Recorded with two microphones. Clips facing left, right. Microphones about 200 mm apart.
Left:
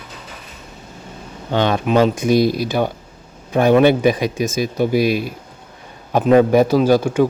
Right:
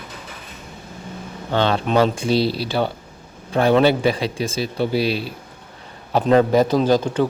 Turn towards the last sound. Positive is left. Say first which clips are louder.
# left 3 dB
turn(degrees=10)  # may be behind; listen again after turning